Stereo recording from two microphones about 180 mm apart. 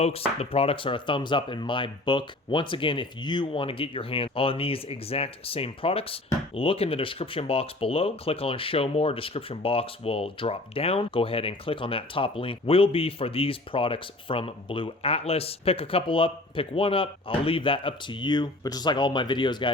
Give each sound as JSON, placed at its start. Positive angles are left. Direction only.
{"t": 0.0, "sound": "speech", "side_deg": 35}